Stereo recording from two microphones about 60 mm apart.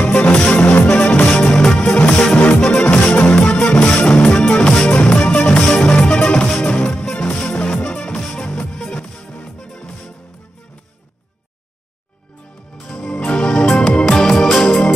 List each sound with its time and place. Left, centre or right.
0.0 s music: centre
1.9 s music: left
13.2 s music: left